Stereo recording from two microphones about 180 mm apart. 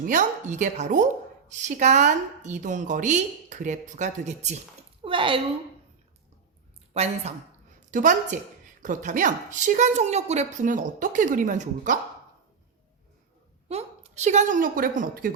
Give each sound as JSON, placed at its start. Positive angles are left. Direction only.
{"t": 0.0, "sound": "a woman's voice", "side_deg": -45}
{"t": 6.9, "sound": "a woman's voice", "side_deg": -35}
{"t": 13.7, "sound": "a woman's voice", "side_deg": -35}